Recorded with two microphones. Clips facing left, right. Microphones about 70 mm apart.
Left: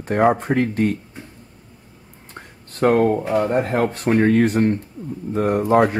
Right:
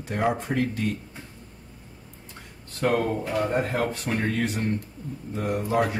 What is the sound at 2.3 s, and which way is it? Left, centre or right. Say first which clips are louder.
Speech: left 10 dB; left.